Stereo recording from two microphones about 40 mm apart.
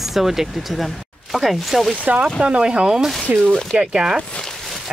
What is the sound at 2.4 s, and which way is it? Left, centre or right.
Speech, right.